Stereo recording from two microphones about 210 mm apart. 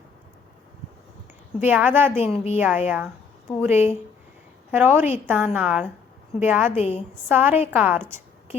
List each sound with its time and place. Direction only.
1.6 s a woman's voice: 10° right (ahead or behind)
2.3 s a woman's voice: 30° left (ahead or behind)
2.6 s a woman's voice: 10° right (ahead or behind)